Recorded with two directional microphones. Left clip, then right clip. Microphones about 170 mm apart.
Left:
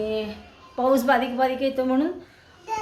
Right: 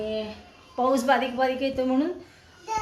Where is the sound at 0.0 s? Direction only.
10° left (ahead or behind).